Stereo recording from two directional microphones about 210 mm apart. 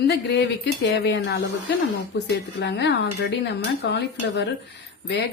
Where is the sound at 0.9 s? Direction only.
55° left (ahead or behind).